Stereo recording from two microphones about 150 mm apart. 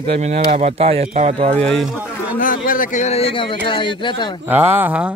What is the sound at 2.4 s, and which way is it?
Speech, 65° left (ahead or behind).